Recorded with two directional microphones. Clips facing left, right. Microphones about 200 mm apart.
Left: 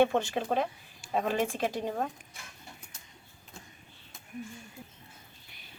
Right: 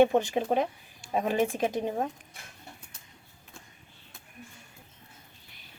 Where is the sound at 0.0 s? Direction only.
15° right (ahead or behind).